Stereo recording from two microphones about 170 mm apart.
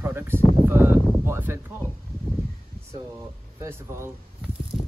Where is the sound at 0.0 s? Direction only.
15° right (ahead or behind).